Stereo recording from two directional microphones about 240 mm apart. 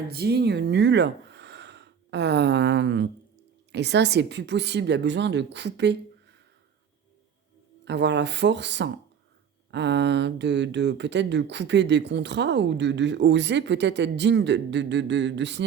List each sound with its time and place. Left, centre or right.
0.1 s speech: right
7.9 s speech: right